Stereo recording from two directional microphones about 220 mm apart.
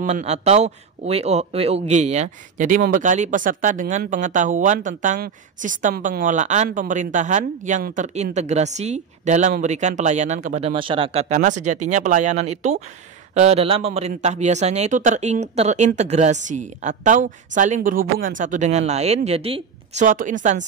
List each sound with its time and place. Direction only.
0.0 s speech: 30° right (ahead or behind)